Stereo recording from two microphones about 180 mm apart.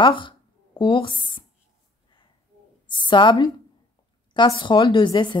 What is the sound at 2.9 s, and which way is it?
A woman's voice, 25° left (ahead or behind).